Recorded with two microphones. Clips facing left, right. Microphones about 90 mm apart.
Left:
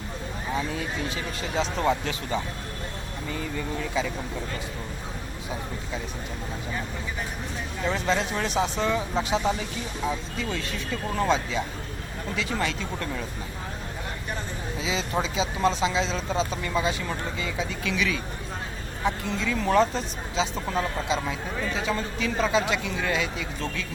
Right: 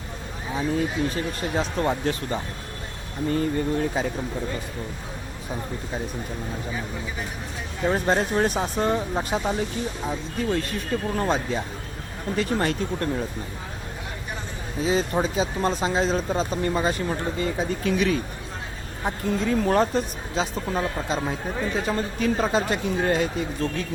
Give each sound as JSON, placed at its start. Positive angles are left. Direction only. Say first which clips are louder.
{"t": 0.7, "sound": "speech", "louder": "right 6 dB", "side_deg": -45}
{"t": 3.2, "sound": "speech", "louder": "right 9 dB", "side_deg": -50}
{"t": 7.9, "sound": "speech", "louder": "right 4 dB", "side_deg": -50}
{"t": 14.8, "sound": "speech", "louder": "right 6 dB", "side_deg": -45}